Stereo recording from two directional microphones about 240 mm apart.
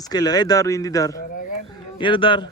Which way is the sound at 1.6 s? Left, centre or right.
Centre.